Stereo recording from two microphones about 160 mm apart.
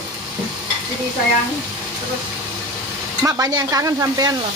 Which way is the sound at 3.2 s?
20° right (ahead or behind).